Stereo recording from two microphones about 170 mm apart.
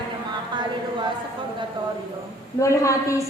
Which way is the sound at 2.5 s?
15° left (ahead or behind).